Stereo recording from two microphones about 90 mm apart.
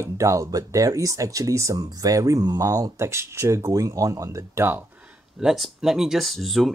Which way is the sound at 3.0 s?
30° right (ahead or behind).